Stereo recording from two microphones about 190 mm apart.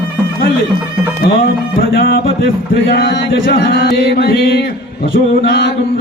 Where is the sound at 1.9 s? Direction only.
55° left (ahead or behind).